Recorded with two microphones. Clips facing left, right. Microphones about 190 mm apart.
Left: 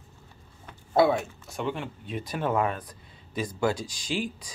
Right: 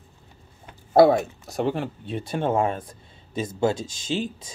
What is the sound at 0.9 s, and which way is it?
Speech, 40° right (ahead or behind).